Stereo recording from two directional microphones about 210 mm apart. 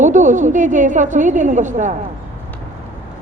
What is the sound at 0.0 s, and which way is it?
Speech, 35° right (ahead or behind).